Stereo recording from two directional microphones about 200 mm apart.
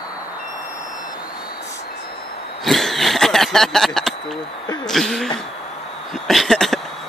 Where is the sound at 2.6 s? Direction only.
Centre (ahead or behind).